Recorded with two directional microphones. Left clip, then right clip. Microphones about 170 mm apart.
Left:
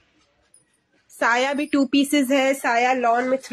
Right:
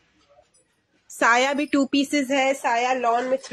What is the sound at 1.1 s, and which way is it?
Speech, centre (ahead or behind).